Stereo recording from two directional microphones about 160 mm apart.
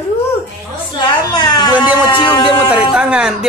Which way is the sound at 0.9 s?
25° left (ahead or behind).